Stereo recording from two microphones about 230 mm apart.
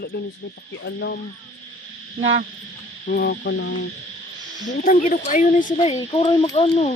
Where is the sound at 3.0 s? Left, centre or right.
Left.